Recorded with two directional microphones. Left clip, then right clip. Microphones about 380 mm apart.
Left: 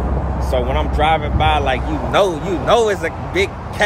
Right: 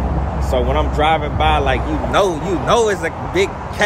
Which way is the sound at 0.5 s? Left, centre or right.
Centre.